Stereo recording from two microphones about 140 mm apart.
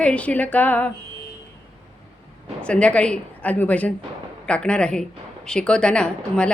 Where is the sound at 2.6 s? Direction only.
10° left (ahead or behind).